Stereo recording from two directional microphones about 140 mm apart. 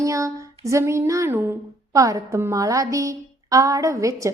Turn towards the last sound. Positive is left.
turn(degrees=-20)  # may be behind; listen again after turning